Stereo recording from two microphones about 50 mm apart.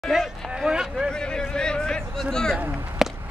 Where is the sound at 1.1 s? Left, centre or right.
Centre.